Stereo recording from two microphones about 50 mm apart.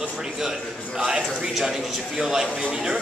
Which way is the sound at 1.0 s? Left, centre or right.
Centre.